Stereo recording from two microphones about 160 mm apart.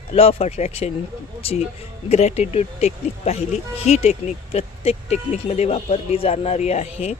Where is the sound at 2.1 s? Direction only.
45° left (ahead or behind).